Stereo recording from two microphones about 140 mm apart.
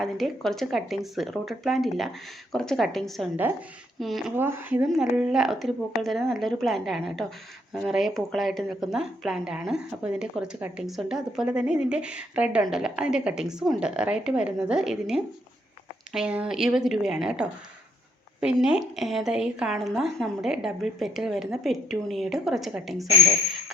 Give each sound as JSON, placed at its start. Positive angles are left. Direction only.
{"t": 0.0, "sound": "a woman's voice", "side_deg": 0}
{"t": 4.4, "sound": "a woman's voice", "side_deg": -15}